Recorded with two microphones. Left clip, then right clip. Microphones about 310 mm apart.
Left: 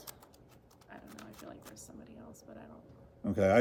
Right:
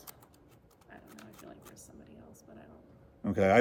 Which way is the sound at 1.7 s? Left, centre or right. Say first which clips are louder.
Left 2 dB; centre.